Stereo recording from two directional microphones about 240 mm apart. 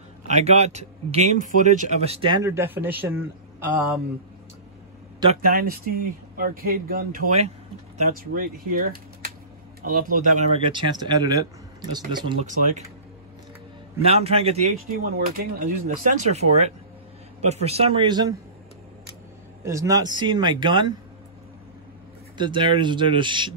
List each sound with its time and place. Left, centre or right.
0.3 s speech: right; by 4.0 s centre
5.3 s a man's voice: right
10.7 s speech: centre
14.0 s speech: right
15.0 s a man's voice: right; by 18.3 s centre
19.6 s speech: centre
22.4 s speech: centre